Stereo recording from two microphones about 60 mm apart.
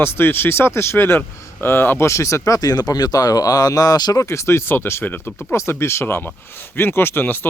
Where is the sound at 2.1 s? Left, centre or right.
Left.